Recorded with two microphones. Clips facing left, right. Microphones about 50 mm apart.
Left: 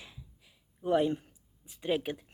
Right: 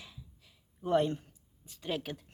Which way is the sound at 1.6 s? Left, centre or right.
Centre.